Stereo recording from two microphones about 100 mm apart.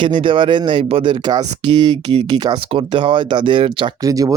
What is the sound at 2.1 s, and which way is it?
Speech, 65° right (ahead or behind).